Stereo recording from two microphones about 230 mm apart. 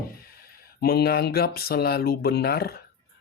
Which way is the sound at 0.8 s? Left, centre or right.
Left.